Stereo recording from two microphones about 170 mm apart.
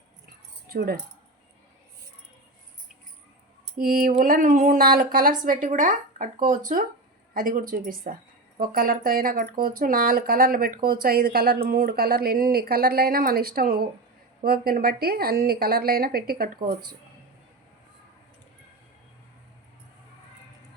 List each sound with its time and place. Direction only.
0.7 s speech: 65° right (ahead or behind)
3.8 s a woman's voice: 60° right (ahead or behind)